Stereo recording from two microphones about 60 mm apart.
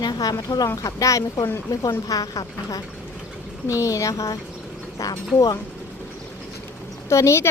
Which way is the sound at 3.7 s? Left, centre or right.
Left.